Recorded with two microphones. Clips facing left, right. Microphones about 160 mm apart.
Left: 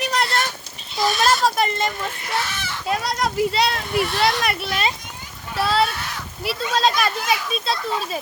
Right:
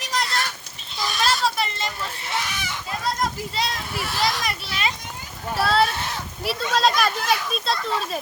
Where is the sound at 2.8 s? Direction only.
75° left (ahead or behind).